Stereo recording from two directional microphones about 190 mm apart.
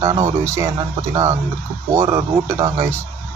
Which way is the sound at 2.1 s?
15° right (ahead or behind).